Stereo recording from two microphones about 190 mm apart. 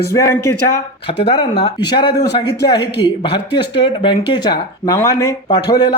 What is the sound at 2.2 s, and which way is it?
Speech, 60° left (ahead or behind).